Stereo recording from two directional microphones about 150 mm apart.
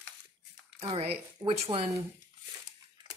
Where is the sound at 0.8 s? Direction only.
40° right (ahead or behind).